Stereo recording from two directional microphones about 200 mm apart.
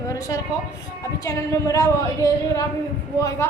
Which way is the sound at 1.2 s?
15° left (ahead or behind).